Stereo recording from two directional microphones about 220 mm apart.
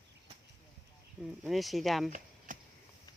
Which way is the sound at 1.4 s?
Centre (ahead or behind).